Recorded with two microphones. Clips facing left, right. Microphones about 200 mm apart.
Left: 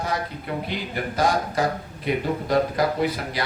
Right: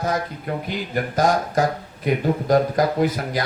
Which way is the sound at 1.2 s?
45° right (ahead or behind).